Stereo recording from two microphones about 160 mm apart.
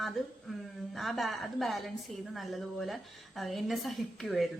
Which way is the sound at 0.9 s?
Centre (ahead or behind).